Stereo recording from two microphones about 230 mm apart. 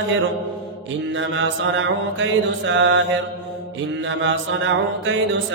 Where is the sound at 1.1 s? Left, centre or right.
Right.